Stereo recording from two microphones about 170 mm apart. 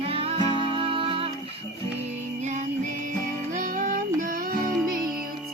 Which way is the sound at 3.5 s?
50° right (ahead or behind).